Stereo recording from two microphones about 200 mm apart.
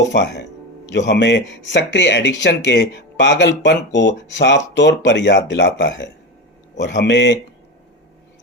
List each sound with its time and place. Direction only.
0.0 s speech: 60° left (ahead or behind)